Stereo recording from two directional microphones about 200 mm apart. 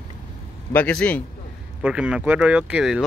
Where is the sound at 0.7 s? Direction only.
5° left (ahead or behind).